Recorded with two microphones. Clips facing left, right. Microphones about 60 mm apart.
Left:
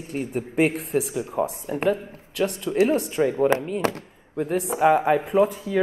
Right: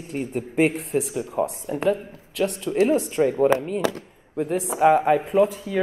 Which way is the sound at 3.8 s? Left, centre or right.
Left.